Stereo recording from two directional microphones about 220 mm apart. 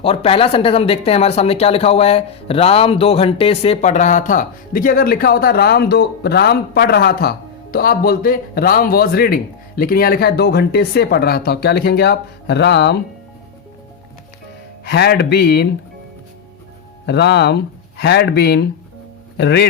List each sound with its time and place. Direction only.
0.0 s speech: 25° left (ahead or behind); by 13.0 s 50° left (ahead or behind)
14.8 s speech: 50° left (ahead or behind)
17.1 s speech: 50° left (ahead or behind)